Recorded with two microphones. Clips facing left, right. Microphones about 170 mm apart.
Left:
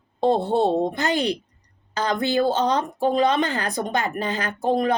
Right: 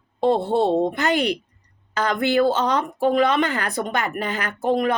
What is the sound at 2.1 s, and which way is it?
A woman's voice, 35° left (ahead or behind).